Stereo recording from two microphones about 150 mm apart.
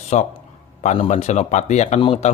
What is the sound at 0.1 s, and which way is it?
A man's voice, 55° left (ahead or behind).